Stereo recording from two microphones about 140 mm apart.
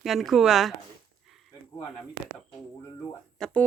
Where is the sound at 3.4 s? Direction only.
10° left (ahead or behind).